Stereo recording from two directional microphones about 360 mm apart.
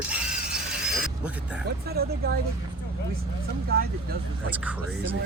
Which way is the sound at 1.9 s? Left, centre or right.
Right.